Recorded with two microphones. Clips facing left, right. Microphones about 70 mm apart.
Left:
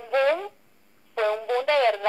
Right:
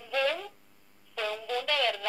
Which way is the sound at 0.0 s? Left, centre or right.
Left.